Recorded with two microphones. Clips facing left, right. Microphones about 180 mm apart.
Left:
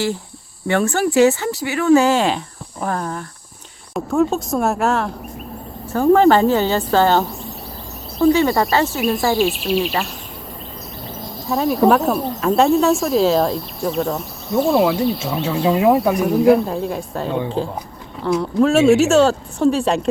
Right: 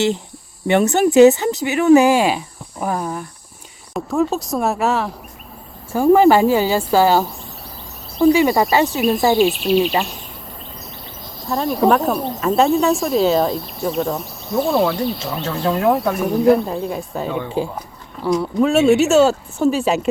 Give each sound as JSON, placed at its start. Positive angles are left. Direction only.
{"t": 0.7, "sound": "a woman's voice", "side_deg": -20}
{"t": 3.9, "sound": "cricket", "side_deg": 0}
{"t": 5.9, "sound": "a woman's voice", "side_deg": -10}
{"t": 8.3, "sound": "a woman's voice", "side_deg": -15}
{"t": 8.9, "sound": "cricket", "side_deg": 0}
{"t": 11.4, "sound": "cricket", "side_deg": 0}
{"t": 17.6, "sound": "a woman's voice", "side_deg": -5}
{"t": 18.2, "sound": "cricket", "side_deg": 0}